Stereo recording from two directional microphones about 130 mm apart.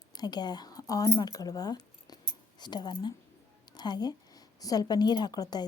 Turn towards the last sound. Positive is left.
turn(degrees=30)  # may be behind; listen again after turning